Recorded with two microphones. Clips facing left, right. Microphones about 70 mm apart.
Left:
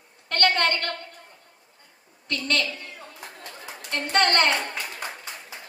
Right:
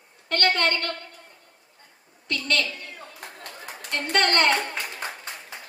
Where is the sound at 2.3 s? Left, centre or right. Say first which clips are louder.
Even; left.